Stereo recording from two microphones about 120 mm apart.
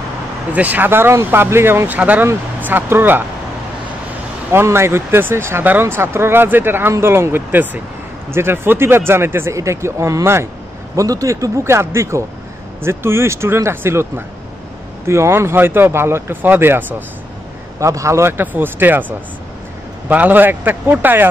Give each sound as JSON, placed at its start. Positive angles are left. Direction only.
{"t": 0.5, "sound": "speech", "side_deg": -15}
{"t": 4.5, "sound": "speech", "side_deg": -20}